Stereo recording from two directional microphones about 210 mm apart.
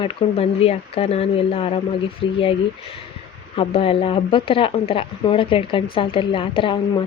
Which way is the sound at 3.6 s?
25° left (ahead or behind).